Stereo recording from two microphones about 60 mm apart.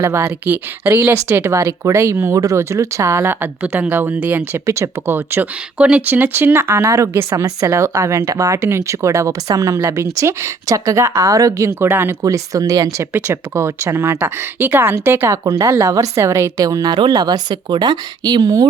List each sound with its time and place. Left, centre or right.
0.0 s speech: right
1.6 s speech: right
2.3 s a woman's voice: right
3.4 s speech: right
4.6 s speech: right
5.1 s speech: right
5.7 s a woman's voice: centre; by 8.5 s right
8.5 s a woman's voice: right
12.2 s speech: right
13.1 s speech: right
15.4 s a woman's voice: right
16.6 s speech: right
18.4 s speech: right